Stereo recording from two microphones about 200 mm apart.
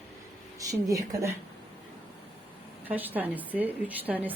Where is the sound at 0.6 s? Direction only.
15° right (ahead or behind).